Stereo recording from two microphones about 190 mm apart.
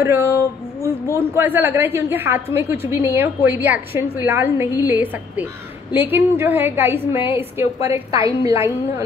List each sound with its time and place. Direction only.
0.0 s a woman's voice: 15° right (ahead or behind)
0.4 s a sound: 15° left (ahead or behind)
1.3 s a woman's voice: 10° right (ahead or behind)